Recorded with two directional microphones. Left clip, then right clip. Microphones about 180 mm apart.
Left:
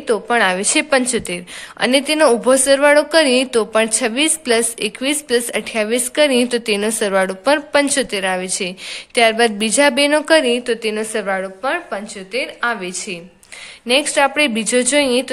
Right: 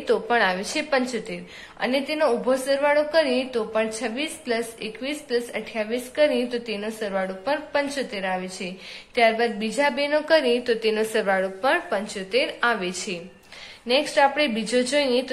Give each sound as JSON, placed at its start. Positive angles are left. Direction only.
{"t": 0.0, "sound": "a woman's voice", "side_deg": 35}
{"t": 13.8, "sound": "a woman's voice", "side_deg": 40}